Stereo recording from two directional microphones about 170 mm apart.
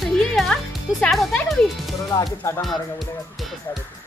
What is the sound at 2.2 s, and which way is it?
Music, 25° left (ahead or behind).